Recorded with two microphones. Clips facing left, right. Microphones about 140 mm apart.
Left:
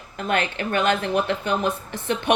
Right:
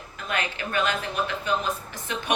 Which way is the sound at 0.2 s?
50° left (ahead or behind).